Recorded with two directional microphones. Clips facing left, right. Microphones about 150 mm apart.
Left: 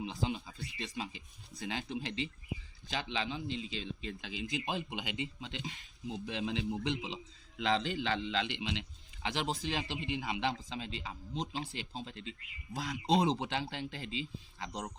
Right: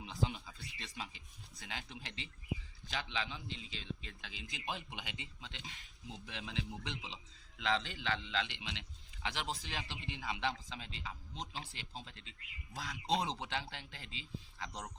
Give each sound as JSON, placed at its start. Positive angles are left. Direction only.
{"t": 0.0, "sound": "a sound", "side_deg": 25}
{"t": 0.8, "sound": "speech", "side_deg": 20}
{"t": 3.4, "sound": "speech", "side_deg": 90}
{"t": 4.0, "sound": "speech", "side_deg": 20}